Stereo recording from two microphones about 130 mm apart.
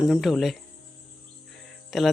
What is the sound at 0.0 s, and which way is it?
Speech, centre (ahead or behind).